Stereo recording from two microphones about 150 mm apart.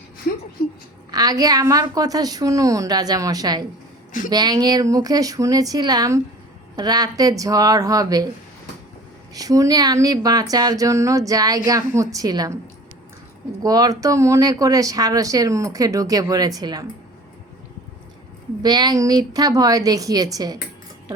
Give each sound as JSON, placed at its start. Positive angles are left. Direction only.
{"t": 1.1, "sound": "speech", "side_deg": -25}
{"t": 9.3, "sound": "speech", "side_deg": -25}
{"t": 13.6, "sound": "speech", "side_deg": -25}
{"t": 18.6, "sound": "speech", "side_deg": -25}